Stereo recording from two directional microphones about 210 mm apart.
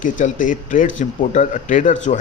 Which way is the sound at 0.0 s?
40° left (ahead or behind).